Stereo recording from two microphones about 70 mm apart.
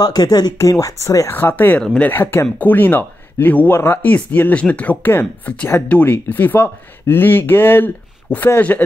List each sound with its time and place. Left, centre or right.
0.0 s speech: left
0.6 s speech: left
1.3 s speech: left
4.0 s speech: left